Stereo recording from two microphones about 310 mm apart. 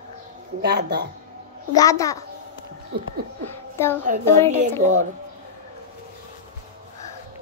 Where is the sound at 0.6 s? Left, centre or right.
Right.